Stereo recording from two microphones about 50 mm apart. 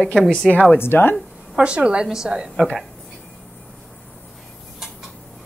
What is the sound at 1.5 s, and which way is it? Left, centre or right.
Speech, right.